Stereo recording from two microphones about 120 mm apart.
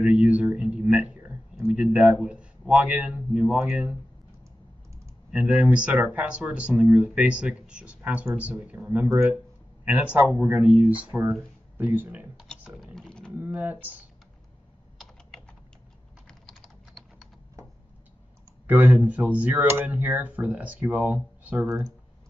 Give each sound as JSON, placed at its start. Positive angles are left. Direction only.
{"t": 0.0, "sound": "a sound", "side_deg": -10}
{"t": 1.7, "sound": "speech", "side_deg": -10}
{"t": 5.3, "sound": "speech", "side_deg": -10}
{"t": 12.8, "sound": "typing", "side_deg": 5}
{"t": 13.4, "sound": "speech", "side_deg": -15}
{"t": 16.3, "sound": "typing", "side_deg": 5}
{"t": 17.6, "sound": "a sound", "side_deg": -25}
{"t": 18.7, "sound": "speech", "side_deg": -15}